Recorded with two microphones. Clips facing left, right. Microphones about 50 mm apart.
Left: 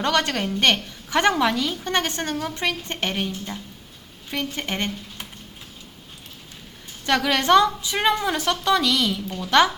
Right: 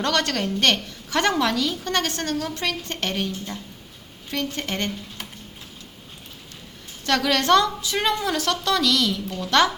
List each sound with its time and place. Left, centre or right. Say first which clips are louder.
0.0 s a woman's voice: left 1 dB; centre
7.0 s a woman's voice: even; centre